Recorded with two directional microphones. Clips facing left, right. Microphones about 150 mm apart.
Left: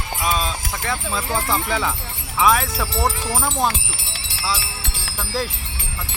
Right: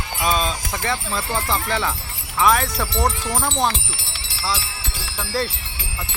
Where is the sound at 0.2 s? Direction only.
5° left (ahead or behind).